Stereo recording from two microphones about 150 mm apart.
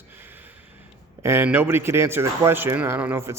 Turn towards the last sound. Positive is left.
turn(degrees=-15)  # may be behind; listen again after turning